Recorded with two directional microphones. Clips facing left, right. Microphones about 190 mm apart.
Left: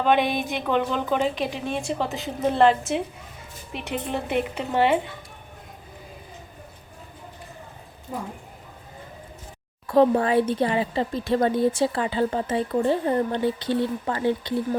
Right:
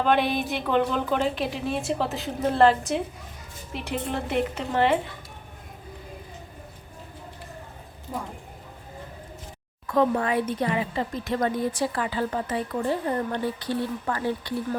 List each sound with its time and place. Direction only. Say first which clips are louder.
0.0 s a woman's voice: left 1 dB; centre (ahead or behind)
4.1 s a woman's voice: left 1 dB; 5° left (ahead or behind)
9.8 s speech: left 4 dB; 30° left (ahead or behind)